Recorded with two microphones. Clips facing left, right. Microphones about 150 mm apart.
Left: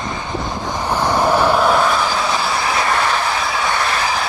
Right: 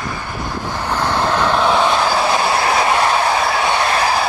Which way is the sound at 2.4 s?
55° right (ahead or behind).